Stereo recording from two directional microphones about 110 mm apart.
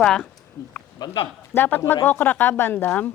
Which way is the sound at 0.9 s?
40° left (ahead or behind).